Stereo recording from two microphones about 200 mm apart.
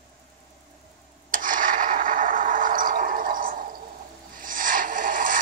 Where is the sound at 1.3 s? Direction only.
45° right (ahead or behind).